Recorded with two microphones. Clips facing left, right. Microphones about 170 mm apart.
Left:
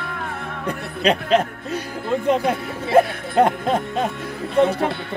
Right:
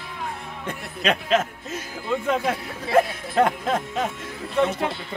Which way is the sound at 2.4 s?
30° left (ahead or behind).